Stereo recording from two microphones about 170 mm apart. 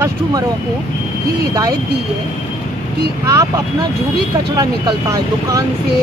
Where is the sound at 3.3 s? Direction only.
20° right (ahead or behind).